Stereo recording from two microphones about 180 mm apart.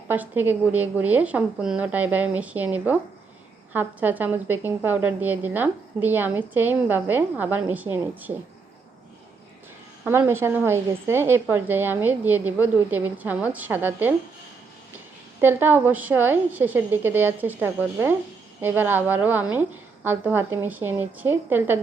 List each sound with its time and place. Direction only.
0.1 s a woman's voice: 10° right (ahead or behind)
10.0 s a woman's voice: 15° right (ahead or behind)
15.4 s a woman's voice: 10° right (ahead or behind)